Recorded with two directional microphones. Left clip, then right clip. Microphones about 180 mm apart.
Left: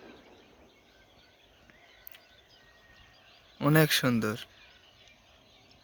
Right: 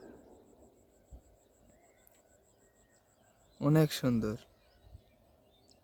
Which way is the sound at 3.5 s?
Centre (ahead or behind).